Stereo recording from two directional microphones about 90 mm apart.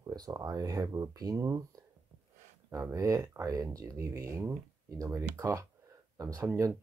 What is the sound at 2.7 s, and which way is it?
Speech, 35° right (ahead or behind).